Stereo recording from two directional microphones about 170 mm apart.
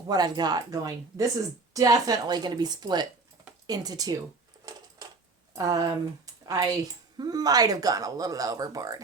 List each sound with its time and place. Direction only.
0.1 s speech: 25° right (ahead or behind)
5.5 s speech: 20° right (ahead or behind)
6.4 s a sound: 20° right (ahead or behind)
7.2 s speech: 25° right (ahead or behind)